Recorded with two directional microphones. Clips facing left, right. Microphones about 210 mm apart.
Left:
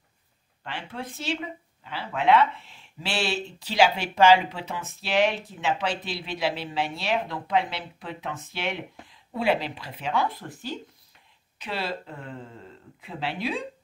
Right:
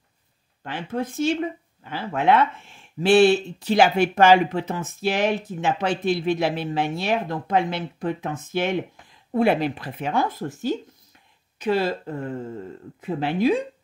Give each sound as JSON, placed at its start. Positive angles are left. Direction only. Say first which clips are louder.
{"t": 0.7, "sound": "speech", "louder": "right 8 dB", "side_deg": -45}